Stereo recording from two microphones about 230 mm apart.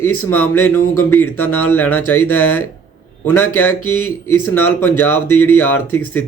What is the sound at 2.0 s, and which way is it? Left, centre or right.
Speech, left.